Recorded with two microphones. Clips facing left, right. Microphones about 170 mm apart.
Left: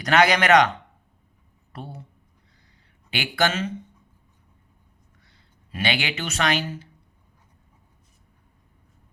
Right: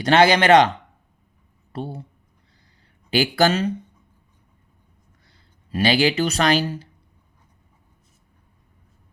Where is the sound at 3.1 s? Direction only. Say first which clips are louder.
Right 6 dB; 35° right (ahead or behind).